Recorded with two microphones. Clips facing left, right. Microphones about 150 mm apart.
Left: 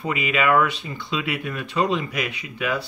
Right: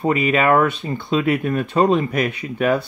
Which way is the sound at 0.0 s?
45° right (ahead or behind).